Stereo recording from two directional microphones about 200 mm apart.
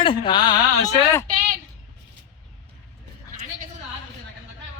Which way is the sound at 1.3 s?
45° right (ahead or behind).